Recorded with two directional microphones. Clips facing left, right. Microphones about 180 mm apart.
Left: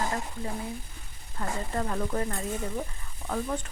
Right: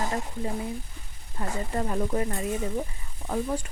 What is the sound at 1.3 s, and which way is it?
Speech, 20° right (ahead or behind).